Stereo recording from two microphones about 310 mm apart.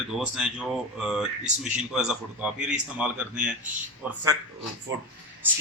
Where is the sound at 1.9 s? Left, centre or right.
Centre.